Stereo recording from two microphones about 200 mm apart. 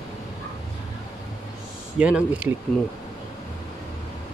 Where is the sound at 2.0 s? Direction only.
5° right (ahead or behind).